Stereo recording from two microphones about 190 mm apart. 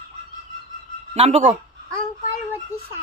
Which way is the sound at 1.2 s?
35° right (ahead or behind).